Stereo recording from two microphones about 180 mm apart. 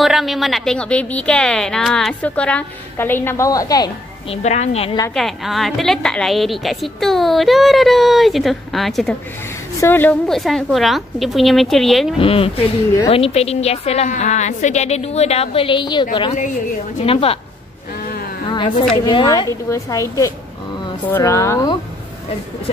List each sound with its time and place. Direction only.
0.0 s a woman's voice: centre (ahead or behind); by 3.9 s 20° left (ahead or behind)
4.3 s a woman's voice: 40° left (ahead or behind)
5.1 s a woman's voice: centre (ahead or behind)
9.8 s a woman's voice: 10° left (ahead or behind)
12.2 s a woman's voice: 30° left (ahead or behind)
19.0 s a woman's voice: 25° left (ahead or behind)